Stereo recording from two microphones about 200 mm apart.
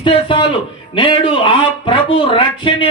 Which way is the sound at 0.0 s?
25° left (ahead or behind).